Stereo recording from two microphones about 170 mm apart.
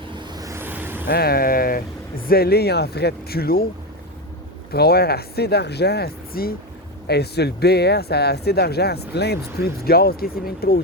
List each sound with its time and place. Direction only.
0.2 s vehicle: 25° right (ahead or behind)
1.0 s speech: 70° left (ahead or behind)
4.7 s speech: 70° left (ahead or behind)